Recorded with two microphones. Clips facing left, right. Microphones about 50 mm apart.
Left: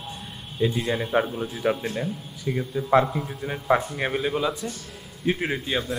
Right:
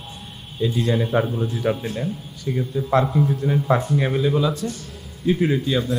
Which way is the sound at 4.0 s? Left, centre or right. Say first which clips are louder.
Right 5 dB; left.